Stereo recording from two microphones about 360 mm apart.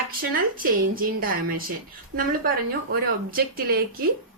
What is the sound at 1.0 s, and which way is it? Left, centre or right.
A woman's voice, right.